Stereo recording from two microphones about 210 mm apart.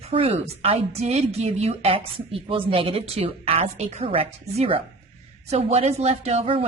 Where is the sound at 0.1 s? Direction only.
25° right (ahead or behind).